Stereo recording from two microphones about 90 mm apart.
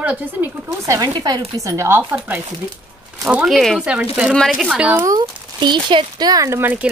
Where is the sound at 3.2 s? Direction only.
5° right (ahead or behind).